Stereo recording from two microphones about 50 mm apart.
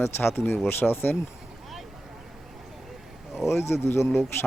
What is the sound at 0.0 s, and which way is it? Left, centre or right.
Speech, left.